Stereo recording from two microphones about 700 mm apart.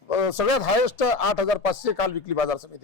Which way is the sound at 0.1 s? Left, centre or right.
Left.